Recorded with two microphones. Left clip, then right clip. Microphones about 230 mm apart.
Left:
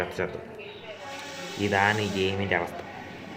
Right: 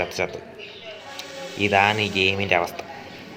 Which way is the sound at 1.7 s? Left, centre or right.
Right.